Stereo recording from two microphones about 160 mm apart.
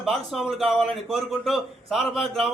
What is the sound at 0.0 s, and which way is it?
A man's voice, centre (ahead or behind).